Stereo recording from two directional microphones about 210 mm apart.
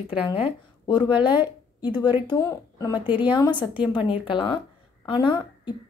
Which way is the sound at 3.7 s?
5° right (ahead or behind).